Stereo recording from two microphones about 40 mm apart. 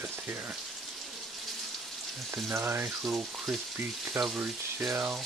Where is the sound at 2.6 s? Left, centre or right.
Right.